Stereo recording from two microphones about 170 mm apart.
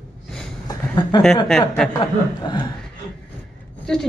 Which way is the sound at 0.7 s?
25° left (ahead or behind).